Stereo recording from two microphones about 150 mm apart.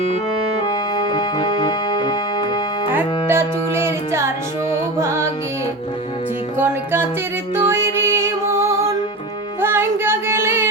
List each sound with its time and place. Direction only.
0.6 s music: 30° left (ahead or behind)
2.9 s music: 15° right (ahead or behind)
6.6 s music: 15° right (ahead or behind)